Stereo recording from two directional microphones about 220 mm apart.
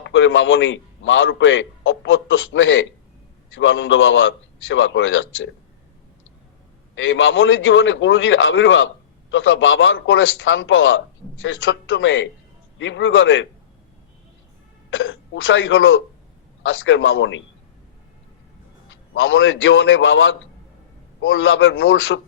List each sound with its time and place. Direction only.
0.0 s a man's voice: 60° left (ahead or behind)
6.9 s a man's voice: 60° left (ahead or behind)
14.8 s a man's voice: 60° left (ahead or behind)
19.1 s a man's voice: 60° left (ahead or behind)